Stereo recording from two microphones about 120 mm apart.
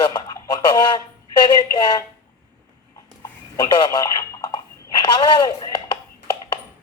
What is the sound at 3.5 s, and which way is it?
Telephone, 35° left (ahead or behind).